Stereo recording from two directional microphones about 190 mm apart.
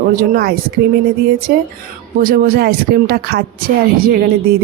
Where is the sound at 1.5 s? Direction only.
50° right (ahead or behind).